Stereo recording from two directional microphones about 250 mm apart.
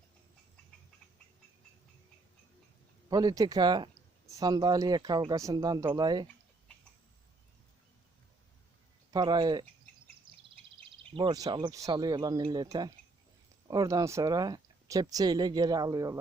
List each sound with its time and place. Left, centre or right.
3.1 s speech: centre
9.1 s speech: centre
11.1 s speech: centre